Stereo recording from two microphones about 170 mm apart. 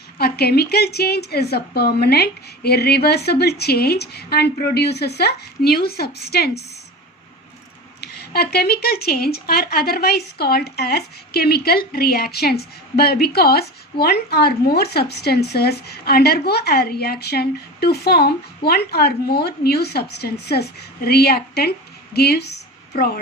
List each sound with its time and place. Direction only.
0.2 s a woman's voice: 65° left (ahead or behind)
8.0 s a woman's voice: 70° left (ahead or behind)